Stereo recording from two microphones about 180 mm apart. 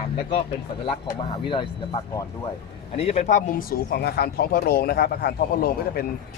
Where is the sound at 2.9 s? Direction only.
35° left (ahead or behind); by 6.0 s 60° left (ahead or behind).